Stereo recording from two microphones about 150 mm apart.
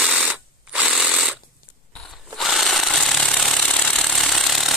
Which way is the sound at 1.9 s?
5° left (ahead or behind).